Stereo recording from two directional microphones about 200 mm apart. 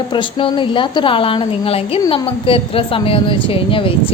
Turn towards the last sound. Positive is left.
turn(degrees=25)  # may be behind; listen again after turning